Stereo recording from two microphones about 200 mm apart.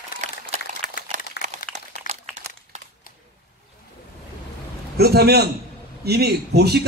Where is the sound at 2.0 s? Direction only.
40° left (ahead or behind).